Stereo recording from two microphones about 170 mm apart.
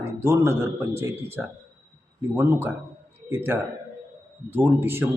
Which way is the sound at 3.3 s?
15° right (ahead or behind).